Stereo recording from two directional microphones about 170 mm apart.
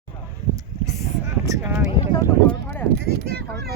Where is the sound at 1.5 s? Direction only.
15° right (ahead or behind).